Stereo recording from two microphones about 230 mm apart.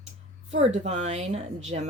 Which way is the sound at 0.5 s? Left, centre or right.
Right.